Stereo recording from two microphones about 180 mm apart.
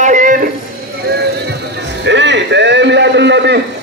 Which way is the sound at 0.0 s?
45° right (ahead or behind).